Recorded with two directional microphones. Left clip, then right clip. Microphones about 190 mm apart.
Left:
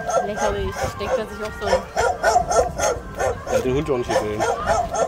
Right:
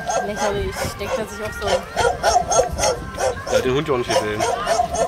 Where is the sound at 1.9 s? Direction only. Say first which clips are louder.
Right 1 dB; 10° left (ahead or behind).